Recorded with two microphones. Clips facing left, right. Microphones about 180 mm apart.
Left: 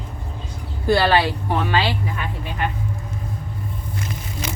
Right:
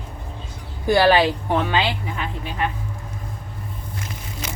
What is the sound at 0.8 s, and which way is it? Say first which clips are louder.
Speech: right 2 dB; 15° right (ahead or behind).